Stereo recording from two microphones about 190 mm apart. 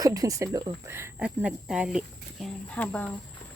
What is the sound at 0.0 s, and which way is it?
Speech, 20° right (ahead or behind).